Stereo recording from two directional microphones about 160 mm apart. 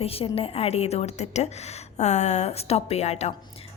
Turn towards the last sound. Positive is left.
turn(degrees=45)  # may be behind; listen again after turning